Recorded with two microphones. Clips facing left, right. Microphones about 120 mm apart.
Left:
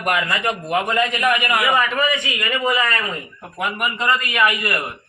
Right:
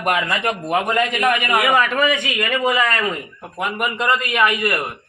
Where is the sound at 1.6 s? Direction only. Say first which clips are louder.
Right 2 dB; 70° right (ahead or behind).